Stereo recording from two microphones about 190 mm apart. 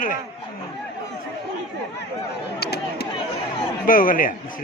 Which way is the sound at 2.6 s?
55° left (ahead or behind).